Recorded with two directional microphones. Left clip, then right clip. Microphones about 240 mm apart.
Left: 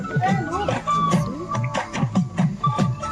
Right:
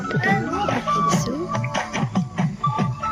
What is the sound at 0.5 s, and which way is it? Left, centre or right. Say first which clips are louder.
Music: right 1 dB; left.